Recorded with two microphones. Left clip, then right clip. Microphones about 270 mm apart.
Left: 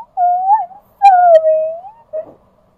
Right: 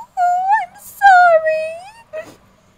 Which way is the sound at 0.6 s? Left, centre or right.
Right.